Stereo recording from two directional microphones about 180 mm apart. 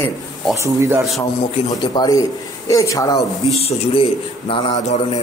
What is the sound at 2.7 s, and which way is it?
Speech, 20° left (ahead or behind).